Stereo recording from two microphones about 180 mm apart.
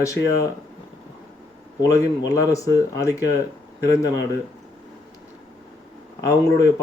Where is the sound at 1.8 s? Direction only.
20° left (ahead or behind).